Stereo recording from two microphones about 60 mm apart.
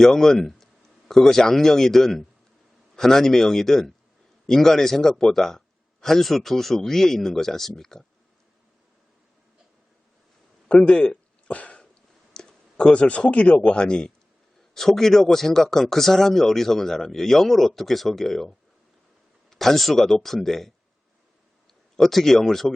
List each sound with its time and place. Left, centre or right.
0.0 s a man's voice: centre
10.7 s a sound: centre
12.3 s speech: centre
21.9 s speech: centre